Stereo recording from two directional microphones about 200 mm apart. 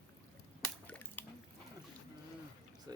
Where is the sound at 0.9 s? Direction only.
10° left (ahead or behind).